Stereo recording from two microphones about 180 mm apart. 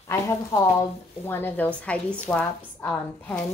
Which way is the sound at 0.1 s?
15° left (ahead or behind).